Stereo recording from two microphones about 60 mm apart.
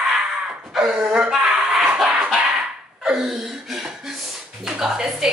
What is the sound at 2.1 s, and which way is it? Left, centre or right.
Cough, centre.